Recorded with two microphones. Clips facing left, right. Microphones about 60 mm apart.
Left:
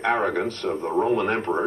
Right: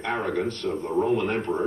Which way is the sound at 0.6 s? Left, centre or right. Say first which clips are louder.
Left 3 dB; left.